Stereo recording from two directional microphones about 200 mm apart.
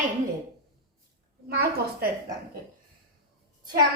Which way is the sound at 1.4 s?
50° right (ahead or behind).